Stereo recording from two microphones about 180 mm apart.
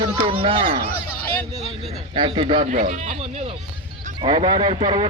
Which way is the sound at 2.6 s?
40° right (ahead or behind).